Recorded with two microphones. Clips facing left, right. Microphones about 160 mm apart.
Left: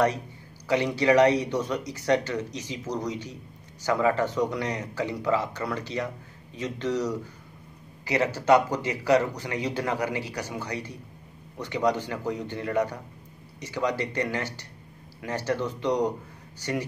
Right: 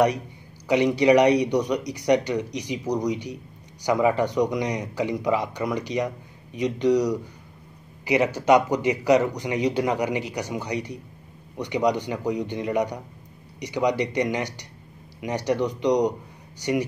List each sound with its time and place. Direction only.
0.7 s speech: 15° right (ahead or behind)